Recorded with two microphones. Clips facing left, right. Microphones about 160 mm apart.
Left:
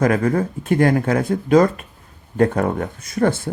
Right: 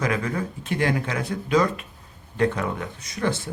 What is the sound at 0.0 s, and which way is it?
Speech, 50° left (ahead or behind).